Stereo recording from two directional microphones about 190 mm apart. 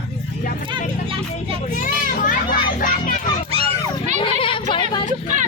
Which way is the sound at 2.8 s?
45° left (ahead or behind).